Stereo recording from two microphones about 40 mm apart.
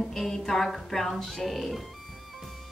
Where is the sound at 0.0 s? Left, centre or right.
Centre.